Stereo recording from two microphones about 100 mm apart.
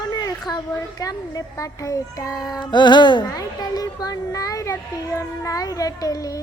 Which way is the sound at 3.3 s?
40° left (ahead or behind).